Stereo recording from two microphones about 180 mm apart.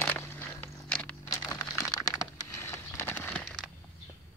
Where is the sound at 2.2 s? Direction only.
15° left (ahead or behind).